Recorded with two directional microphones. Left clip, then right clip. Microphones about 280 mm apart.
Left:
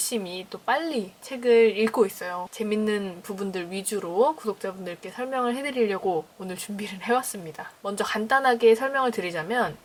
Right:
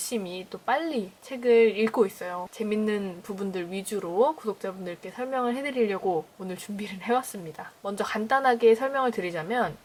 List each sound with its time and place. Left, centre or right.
0.1 s speech: centre
4.1 s a woman's voice: right
4.6 s speech: centre
6.0 s a woman's voice: right
6.5 s speech: centre